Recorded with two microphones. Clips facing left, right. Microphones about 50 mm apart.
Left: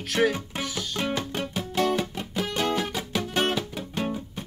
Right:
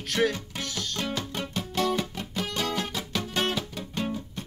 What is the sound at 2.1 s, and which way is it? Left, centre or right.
Music, centre.